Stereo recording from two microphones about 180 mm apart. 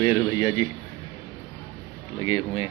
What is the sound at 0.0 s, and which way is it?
Speech, 20° left (ahead or behind).